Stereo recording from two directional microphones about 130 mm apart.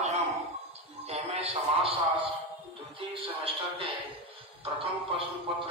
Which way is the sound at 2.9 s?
45° right (ahead or behind).